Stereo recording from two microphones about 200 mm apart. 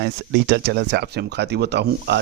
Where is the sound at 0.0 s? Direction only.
60° right (ahead or behind).